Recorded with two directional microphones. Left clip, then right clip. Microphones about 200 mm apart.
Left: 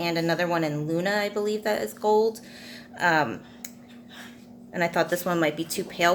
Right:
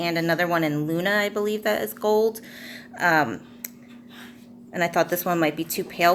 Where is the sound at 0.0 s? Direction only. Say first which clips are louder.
Right 2 dB; 20° right (ahead or behind).